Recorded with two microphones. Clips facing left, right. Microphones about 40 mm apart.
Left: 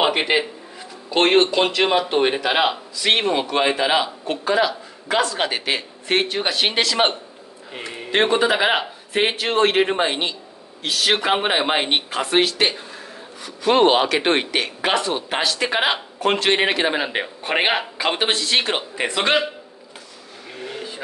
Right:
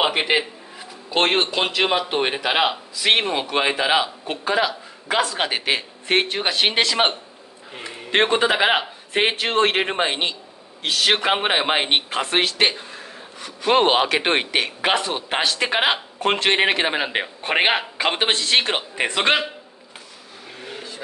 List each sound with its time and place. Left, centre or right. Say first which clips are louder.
0.0 s a sound: left 1 dB; centre
1.1 s a man's voice: left 4 dB; centre; by 19.3 s right
20.5 s vehicle: left 4 dB; centre